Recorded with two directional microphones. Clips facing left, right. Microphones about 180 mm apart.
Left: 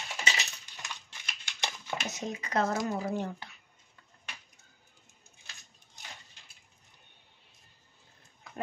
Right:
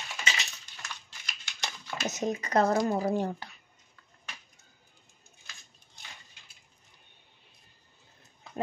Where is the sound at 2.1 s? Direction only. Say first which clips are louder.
Right 8 dB; 45° right (ahead or behind).